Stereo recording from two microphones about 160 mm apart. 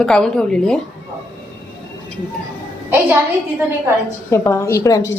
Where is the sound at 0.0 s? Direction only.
5° left (ahead or behind).